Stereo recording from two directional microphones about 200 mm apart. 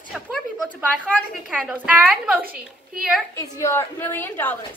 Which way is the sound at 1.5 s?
5° right (ahead or behind).